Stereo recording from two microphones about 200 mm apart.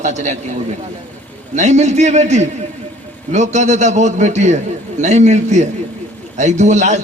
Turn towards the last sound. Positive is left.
turn(degrees=-35)  # may be behind; listen again after turning